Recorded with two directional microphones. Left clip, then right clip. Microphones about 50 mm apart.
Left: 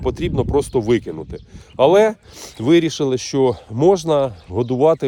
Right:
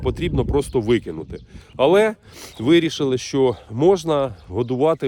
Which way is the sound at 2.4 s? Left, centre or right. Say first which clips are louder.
Left 2 dB; right.